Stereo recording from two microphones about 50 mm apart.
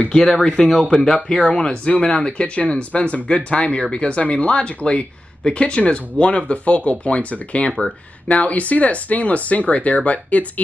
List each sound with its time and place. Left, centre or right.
0.3 s speech: centre